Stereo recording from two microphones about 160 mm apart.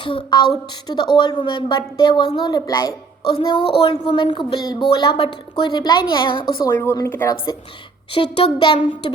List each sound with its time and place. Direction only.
0.0 s a woman's voice: 30° left (ahead or behind)
6.7 s speech: 15° left (ahead or behind)
8.1 s speech: 35° left (ahead or behind)